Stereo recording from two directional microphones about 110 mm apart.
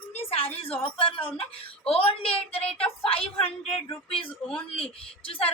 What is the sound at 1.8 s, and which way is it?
Speech, 60° left (ahead or behind).